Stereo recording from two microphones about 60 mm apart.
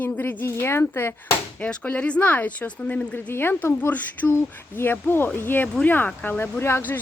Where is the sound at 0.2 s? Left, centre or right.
Left.